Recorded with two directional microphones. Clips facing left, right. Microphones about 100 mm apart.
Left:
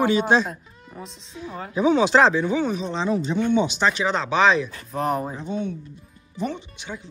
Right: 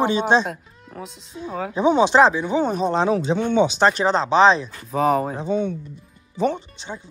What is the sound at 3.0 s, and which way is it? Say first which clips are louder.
Speech: right 2 dB; 90° right.